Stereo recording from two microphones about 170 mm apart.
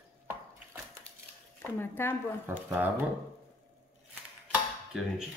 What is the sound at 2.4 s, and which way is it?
Speech, 10° right (ahead or behind).